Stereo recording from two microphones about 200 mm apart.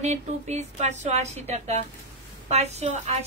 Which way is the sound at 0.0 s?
35° right (ahead or behind).